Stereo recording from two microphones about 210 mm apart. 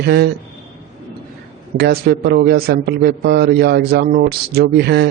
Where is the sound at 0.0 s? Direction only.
50° right (ahead or behind).